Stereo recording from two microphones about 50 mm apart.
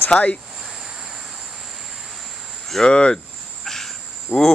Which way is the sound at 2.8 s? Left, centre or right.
Centre.